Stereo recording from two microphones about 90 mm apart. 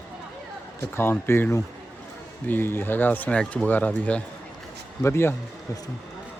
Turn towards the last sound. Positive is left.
turn(degrees=25)  # may be behind; listen again after turning